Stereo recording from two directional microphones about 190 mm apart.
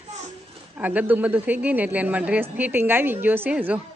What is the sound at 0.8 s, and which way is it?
A woman's voice, 10° right (ahead or behind).